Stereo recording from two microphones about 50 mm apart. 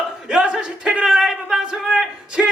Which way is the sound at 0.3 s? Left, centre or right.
Centre.